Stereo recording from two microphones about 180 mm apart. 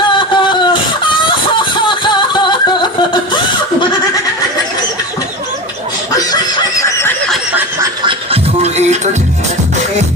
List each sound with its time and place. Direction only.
0.1 s music: 25° left (ahead or behind)
1.7 s a sound: 25° left (ahead or behind)
6.1 s snicker: 20° left (ahead or behind)
8.0 s music: 35° right (ahead or behind)